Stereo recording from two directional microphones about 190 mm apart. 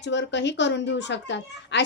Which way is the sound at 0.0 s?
70° left (ahead or behind).